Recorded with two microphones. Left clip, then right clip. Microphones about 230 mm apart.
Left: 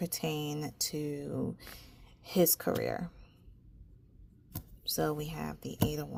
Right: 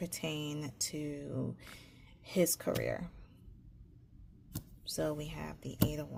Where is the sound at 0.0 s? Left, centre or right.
Left.